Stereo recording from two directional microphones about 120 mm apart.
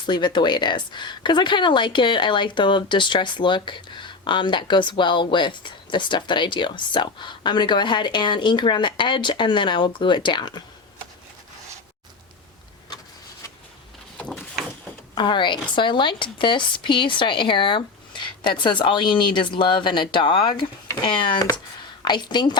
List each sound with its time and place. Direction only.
0.0 s speech: 40° left (ahead or behind)
15.1 s speech: 40° left (ahead or behind)